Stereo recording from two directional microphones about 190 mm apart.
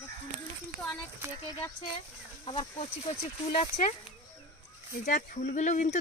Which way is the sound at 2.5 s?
30° left (ahead or behind).